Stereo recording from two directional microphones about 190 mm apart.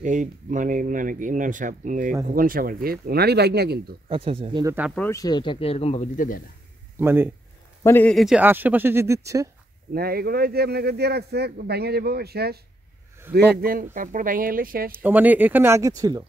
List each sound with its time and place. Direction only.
0.0 s speech: 40° right (ahead or behind); by 3.9 s 55° right (ahead or behind)
4.1 s speech: 30° right (ahead or behind)
4.9 s speech: 15° left (ahead or behind); by 6.4 s 45° left (ahead or behind)
7.0 s speech: 10° right (ahead or behind)
7.8 s speech: 10° left (ahead or behind); by 9.5 s 15° right (ahead or behind)
9.9 s speech: 55° right (ahead or behind)
14.9 s speech: 10° right (ahead or behind)